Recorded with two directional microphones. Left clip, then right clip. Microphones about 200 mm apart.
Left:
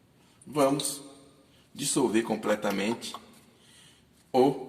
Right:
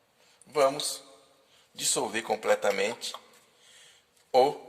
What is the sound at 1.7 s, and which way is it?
Speech, 40° right (ahead or behind).